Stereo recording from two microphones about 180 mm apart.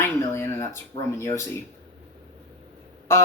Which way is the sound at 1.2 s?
15° left (ahead or behind).